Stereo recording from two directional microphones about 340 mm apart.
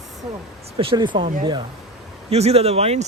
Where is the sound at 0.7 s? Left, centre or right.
Centre.